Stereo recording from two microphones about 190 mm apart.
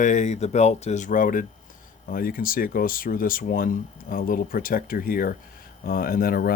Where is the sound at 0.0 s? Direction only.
40° left (ahead or behind).